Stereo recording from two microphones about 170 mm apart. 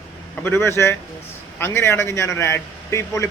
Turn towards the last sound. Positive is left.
turn(degrees=15)  # may be behind; listen again after turning